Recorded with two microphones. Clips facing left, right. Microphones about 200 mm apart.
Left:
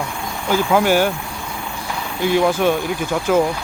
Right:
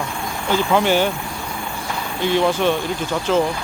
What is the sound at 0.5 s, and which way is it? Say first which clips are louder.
Speech: left 2 dB; 5° left (ahead or behind).